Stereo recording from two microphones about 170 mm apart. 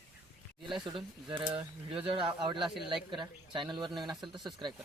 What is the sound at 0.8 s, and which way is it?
Speech, 30° right (ahead or behind).